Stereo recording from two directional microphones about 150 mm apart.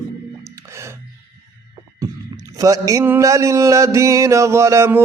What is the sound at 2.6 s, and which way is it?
Mantra, 20° right (ahead or behind).